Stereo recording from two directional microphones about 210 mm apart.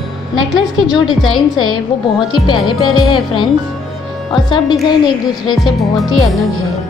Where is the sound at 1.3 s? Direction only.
20° left (ahead or behind).